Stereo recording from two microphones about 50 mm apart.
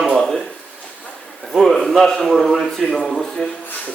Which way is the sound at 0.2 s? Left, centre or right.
Centre.